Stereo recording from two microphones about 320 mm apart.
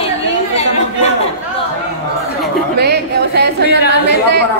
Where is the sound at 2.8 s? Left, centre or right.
Right.